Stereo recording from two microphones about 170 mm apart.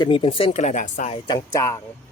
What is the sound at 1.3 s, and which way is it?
Speech, 20° left (ahead or behind).